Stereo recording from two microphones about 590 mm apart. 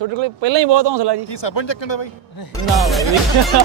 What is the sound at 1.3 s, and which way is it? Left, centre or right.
A man's voice, left.